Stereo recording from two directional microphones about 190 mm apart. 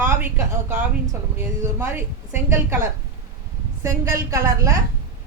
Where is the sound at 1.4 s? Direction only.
10° right (ahead or behind).